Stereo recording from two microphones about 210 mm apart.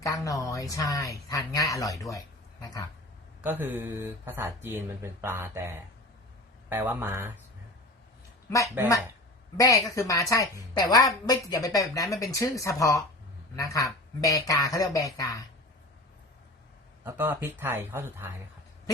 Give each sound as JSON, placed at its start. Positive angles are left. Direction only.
{"t": 0.0, "sound": "speech", "side_deg": 15}
{"t": 3.4, "sound": "speech", "side_deg": -10}
{"t": 8.4, "sound": "speech", "side_deg": 15}
{"t": 17.1, "sound": "speech", "side_deg": -10}